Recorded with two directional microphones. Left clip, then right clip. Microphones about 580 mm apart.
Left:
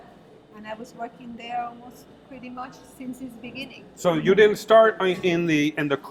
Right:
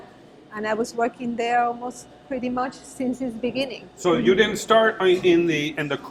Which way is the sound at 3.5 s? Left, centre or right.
Right.